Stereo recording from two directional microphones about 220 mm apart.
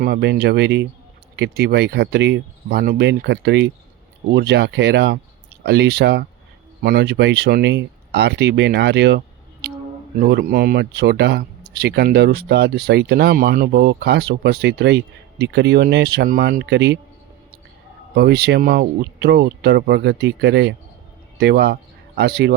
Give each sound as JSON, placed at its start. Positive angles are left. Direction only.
{"t": 0.0, "sound": "speech", "side_deg": -45}
{"t": 18.1, "sound": "speech", "side_deg": -45}